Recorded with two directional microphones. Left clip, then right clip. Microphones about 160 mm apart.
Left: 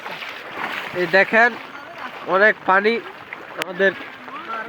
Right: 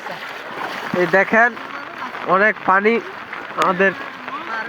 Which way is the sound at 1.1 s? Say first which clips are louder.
Even; 35° left (ahead or behind).